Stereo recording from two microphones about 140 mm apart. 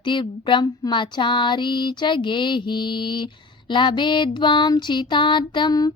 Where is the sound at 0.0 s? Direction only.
35° left (ahead or behind).